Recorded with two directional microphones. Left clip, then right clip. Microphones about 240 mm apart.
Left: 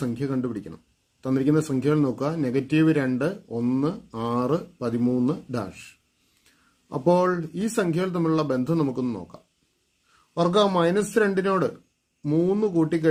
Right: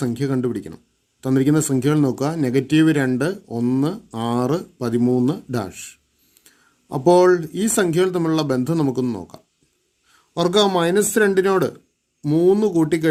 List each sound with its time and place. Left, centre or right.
0.0 s speech: right
6.9 s speech: right